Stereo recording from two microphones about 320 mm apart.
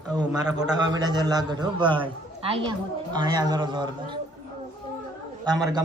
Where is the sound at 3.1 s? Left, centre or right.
Centre.